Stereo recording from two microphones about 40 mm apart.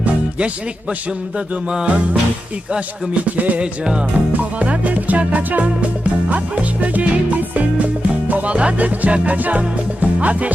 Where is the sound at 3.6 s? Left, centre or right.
Right.